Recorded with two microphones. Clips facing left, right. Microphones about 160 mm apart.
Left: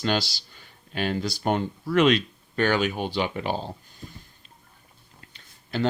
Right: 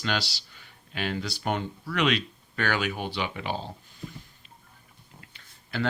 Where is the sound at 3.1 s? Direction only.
40° left (ahead or behind).